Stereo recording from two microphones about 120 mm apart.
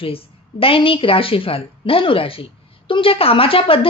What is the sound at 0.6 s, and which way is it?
A woman's voice, 50° left (ahead or behind).